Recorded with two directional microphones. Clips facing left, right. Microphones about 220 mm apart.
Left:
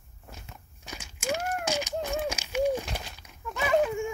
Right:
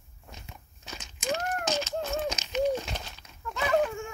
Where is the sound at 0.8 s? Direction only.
10° left (ahead or behind).